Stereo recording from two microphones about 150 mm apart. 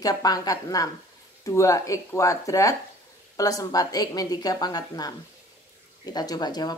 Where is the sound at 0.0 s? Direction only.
25° left (ahead or behind).